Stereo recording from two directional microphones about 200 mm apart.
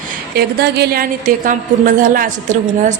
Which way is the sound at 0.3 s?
55° right (ahead or behind).